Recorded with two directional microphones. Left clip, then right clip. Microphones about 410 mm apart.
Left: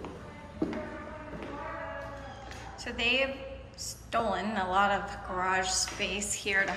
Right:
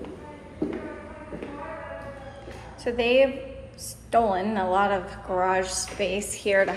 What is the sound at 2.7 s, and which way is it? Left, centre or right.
A woman's voice, centre.